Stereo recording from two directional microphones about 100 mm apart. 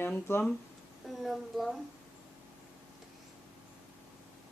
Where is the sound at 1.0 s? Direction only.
Centre (ahead or behind).